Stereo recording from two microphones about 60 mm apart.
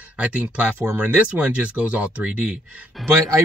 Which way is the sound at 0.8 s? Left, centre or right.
Right.